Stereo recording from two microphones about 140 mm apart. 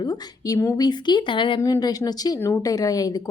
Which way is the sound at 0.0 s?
30° left (ahead or behind).